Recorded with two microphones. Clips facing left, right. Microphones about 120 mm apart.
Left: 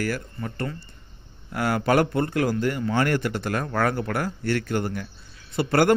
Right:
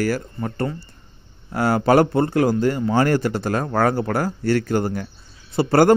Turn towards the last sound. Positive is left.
turn(degrees=-35)  # may be behind; listen again after turning